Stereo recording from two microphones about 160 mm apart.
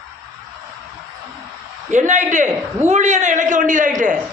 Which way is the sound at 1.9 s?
50° right (ahead or behind).